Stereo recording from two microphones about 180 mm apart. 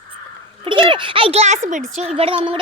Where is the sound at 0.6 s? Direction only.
25° right (ahead or behind).